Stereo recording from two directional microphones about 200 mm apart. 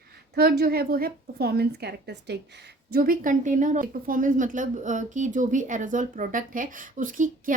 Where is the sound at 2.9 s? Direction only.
45° right (ahead or behind).